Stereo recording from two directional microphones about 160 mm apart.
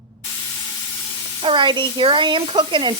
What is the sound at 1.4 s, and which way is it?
Speech, 30° right (ahead or behind).